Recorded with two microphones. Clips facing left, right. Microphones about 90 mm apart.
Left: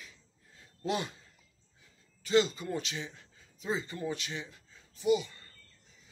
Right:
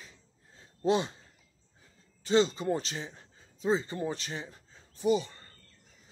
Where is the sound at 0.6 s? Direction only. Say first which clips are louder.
Right 6 dB; 30° right (ahead or behind).